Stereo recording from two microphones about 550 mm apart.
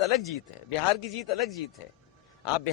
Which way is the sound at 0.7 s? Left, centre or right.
Left.